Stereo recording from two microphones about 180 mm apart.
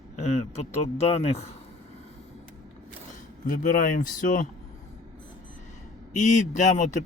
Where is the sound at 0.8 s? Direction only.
35° left (ahead or behind).